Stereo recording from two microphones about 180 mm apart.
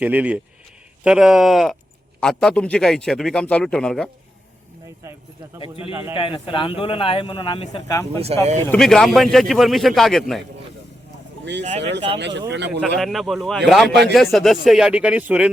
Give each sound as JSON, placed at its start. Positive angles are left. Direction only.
{"t": 0.0, "sound": "speech", "side_deg": -10}
{"t": 5.0, "sound": "speech", "side_deg": -15}
{"t": 5.5, "sound": "a man's voice", "side_deg": 30}
{"t": 7.9, "sound": "speech", "side_deg": 15}
{"t": 8.7, "sound": "speech", "side_deg": 5}
{"t": 11.8, "sound": "speech", "side_deg": -75}
{"t": 12.8, "sound": "speech", "side_deg": 0}